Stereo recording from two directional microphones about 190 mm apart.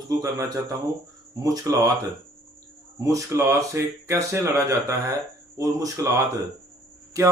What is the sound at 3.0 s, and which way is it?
Speech, 15° right (ahead or behind).